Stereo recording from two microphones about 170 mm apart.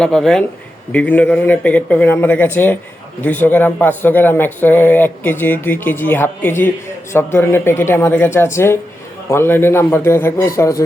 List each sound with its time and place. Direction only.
0.0 s speech: 5° left (ahead or behind); by 10.8 s 20° left (ahead or behind)